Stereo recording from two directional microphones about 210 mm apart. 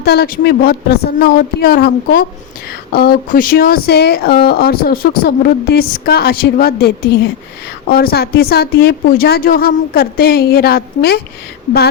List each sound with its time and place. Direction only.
0.0 s speech: 50° left (ahead or behind)